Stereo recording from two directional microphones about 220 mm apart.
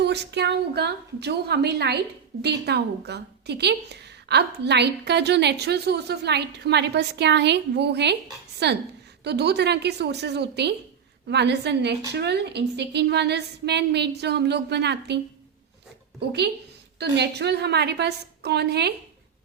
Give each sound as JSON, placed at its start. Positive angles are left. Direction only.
{"t": 0.0, "sound": "a woman's voice", "side_deg": -50}
{"t": 17.0, "sound": "a woman's voice", "side_deg": -50}